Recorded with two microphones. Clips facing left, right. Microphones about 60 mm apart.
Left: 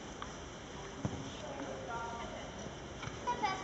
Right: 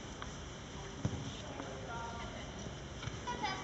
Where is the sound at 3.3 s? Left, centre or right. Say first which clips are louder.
Left 4 dB; left.